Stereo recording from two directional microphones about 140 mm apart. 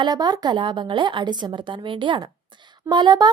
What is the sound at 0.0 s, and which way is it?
A woman's voice, 30° right (ahead or behind).